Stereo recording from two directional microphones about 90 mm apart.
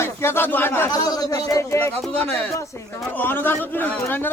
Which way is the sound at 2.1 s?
15° left (ahead or behind).